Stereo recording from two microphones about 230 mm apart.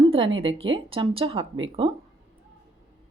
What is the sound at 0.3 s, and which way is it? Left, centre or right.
Speech, right.